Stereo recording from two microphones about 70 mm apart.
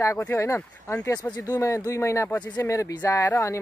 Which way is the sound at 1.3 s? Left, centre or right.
Left.